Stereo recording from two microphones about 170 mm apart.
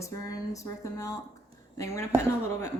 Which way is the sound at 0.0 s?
20° left (ahead or behind).